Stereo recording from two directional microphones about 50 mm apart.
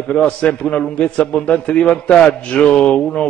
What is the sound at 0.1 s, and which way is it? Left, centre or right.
A man's voice, left.